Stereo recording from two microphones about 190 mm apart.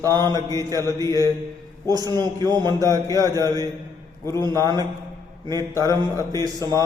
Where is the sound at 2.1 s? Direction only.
20° right (ahead or behind).